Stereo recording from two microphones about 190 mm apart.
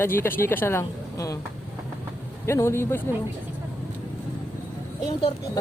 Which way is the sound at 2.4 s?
15° left (ahead or behind).